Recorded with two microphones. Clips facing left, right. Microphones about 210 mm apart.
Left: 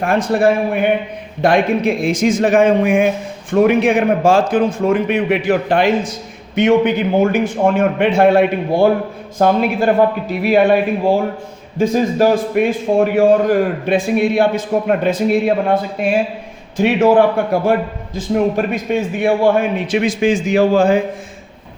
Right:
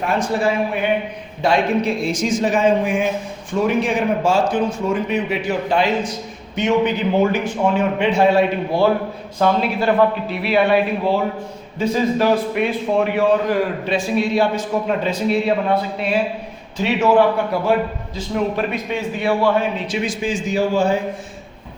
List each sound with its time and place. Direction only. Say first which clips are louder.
0.0 s a man's voice: left 5 dB; 50° left (ahead or behind)
2.1 s a man's voice: left 8 dB; 75° left (ahead or behind); by 5.4 s 55° left (ahead or behind)
6.6 s a man's voice: left 5 dB; 55° left (ahead or behind)
20.7 s speech: left 4 dB; 90° left